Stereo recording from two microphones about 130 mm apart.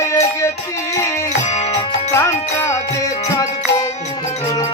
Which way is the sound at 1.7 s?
20° left (ahead or behind).